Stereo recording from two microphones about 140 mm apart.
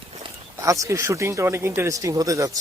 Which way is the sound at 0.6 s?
25° right (ahead or behind).